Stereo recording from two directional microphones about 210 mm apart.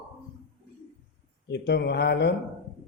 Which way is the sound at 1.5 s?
55° left (ahead or behind).